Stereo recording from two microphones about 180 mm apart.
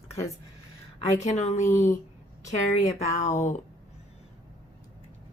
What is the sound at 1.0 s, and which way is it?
Speech, 40° left (ahead or behind).